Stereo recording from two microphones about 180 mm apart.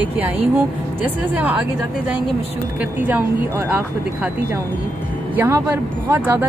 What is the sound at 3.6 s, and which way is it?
Speech, 10° right (ahead or behind).